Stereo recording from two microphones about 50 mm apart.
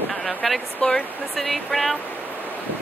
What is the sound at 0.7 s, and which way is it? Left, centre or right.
Speech, centre.